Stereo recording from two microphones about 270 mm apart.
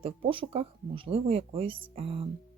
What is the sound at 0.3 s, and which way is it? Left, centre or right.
Speech, right.